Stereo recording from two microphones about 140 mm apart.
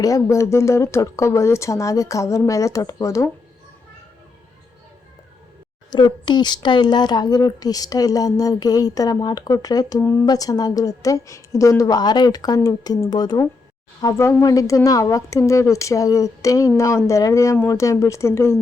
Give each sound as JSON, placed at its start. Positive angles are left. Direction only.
{"t": 0.0, "sound": "speech", "side_deg": 25}
{"t": 5.9, "sound": "speech", "side_deg": 30}